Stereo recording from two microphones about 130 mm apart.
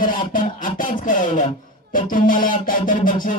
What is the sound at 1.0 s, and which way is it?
Speech, 80° left.